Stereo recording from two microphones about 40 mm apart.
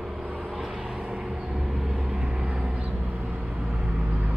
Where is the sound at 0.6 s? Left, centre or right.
Centre.